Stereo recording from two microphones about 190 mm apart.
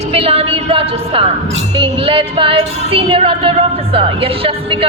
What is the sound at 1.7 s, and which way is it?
Speech, 30° right (ahead or behind).